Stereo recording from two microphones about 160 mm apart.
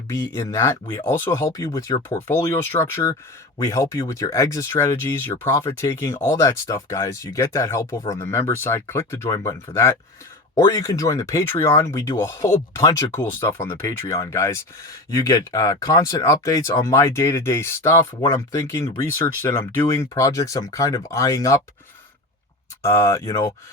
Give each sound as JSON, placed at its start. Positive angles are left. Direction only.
{"t": 0.1, "sound": "speech", "side_deg": 20}
{"t": 22.8, "sound": "speech", "side_deg": 20}